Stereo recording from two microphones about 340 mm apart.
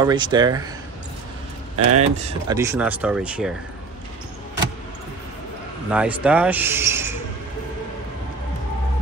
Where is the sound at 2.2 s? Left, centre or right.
Centre.